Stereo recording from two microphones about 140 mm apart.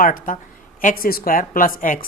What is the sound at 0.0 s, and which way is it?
A woman's voice, 80° left.